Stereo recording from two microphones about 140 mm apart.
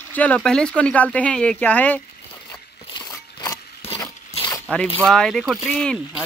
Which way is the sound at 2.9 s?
30° left (ahead or behind).